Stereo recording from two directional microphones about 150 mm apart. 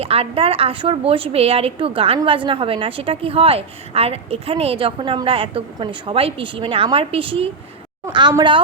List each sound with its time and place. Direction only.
0.0 s a woman's voice: 40° right (ahead or behind)
8.1 s a woman's voice: 25° right (ahead or behind)